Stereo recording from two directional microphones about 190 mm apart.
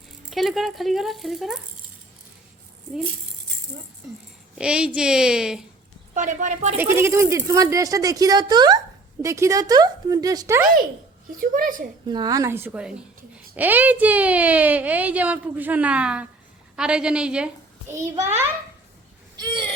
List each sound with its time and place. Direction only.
0.3 s speech: centre (ahead or behind)
4.5 s speech: 5° right (ahead or behind)
6.1 s a woman's voice: 40° right (ahead or behind)
6.7 s a woman's voice: 10° right (ahead or behind)
11.3 s a woman's voice: 45° right (ahead or behind)
12.0 s a woman's voice: 20° right (ahead or behind)
19.4 s speech: 25° right (ahead or behind)